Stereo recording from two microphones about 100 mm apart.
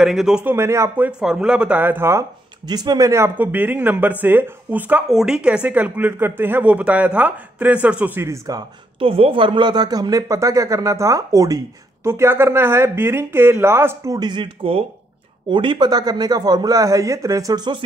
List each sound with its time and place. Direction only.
0.0 s speech: 5° right (ahead or behind)
0.5 s speech: 25° right (ahead or behind)
1.2 s speech: 10° right (ahead or behind); by 2.2 s 25° right (ahead or behind)
2.6 s speech: 45° right (ahead or behind)
3.3 s speech: 20° right (ahead or behind)
5.1 s speech: 5° right (ahead or behind)
8.3 s speech: 40° right (ahead or behind)
9.0 s speech: 65° right (ahead or behind); by 14.1 s 25° right (ahead or behind)
14.1 s speech: 50° right (ahead or behind); by 14.9 s 65° right (ahead or behind)
15.5 s speech: 50° right (ahead or behind); by 17.6 s 35° right (ahead or behind)